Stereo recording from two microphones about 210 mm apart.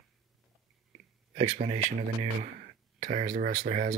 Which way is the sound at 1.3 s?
30° right (ahead or behind).